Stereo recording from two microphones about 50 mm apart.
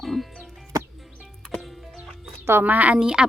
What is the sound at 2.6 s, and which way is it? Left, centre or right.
Speech, right.